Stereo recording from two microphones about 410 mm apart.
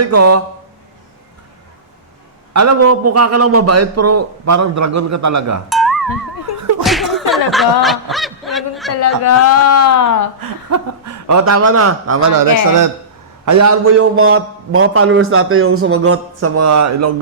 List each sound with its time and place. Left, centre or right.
0.0 s a man's voice: right
2.5 s a man's voice: right
5.6 s music: centre
6.8 s snicker: centre
8.9 s a man's voice: left
10.7 s a man's voice: right
12.4 s a man's voice: right